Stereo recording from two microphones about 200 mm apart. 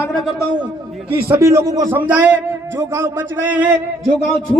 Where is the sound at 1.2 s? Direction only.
15° right (ahead or behind).